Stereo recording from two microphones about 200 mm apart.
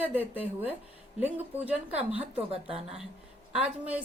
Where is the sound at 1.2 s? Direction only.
10° right (ahead or behind).